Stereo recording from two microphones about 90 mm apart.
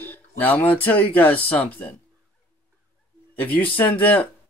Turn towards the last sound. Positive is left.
turn(degrees=20)  # may be behind; listen again after turning